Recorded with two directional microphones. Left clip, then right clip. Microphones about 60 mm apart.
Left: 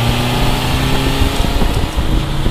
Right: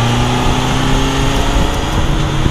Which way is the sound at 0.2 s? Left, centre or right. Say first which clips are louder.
Right 2 dB; centre.